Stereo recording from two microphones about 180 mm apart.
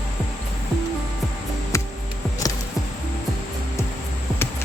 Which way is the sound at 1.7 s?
15° left (ahead or behind).